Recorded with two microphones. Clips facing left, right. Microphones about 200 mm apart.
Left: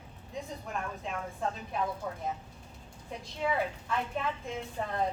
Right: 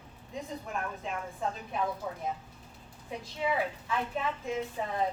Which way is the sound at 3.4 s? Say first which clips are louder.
Even; centre (ahead or behind).